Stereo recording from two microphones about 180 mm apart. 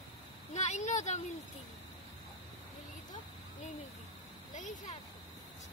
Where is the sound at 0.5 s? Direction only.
40° left (ahead or behind).